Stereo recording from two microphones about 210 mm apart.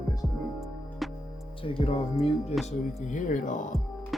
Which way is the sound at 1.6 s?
25° left (ahead or behind).